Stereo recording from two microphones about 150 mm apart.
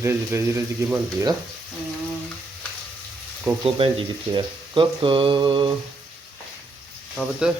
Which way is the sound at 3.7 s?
35° right (ahead or behind).